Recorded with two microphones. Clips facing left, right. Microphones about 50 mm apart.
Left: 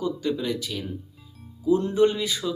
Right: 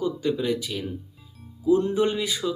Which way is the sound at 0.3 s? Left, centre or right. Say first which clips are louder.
Right 4 dB; centre.